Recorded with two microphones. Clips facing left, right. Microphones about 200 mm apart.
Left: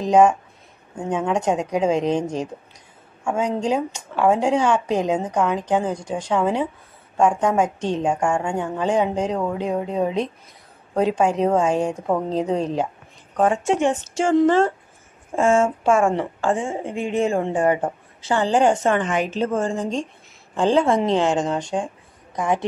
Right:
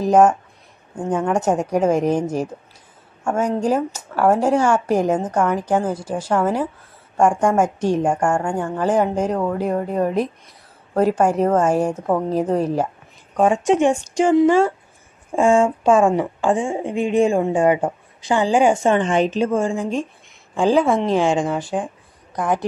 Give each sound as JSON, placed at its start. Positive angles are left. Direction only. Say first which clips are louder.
{"t": 0.0, "sound": "a woman's voice", "louder": "right 1 dB", "side_deg": -5}
{"t": 18.9, "sound": "a woman's voice", "louder": "right 4 dB", "side_deg": -25}
{"t": 19.3, "sound": "a woman's voice", "louder": "right 3 dB", "side_deg": -10}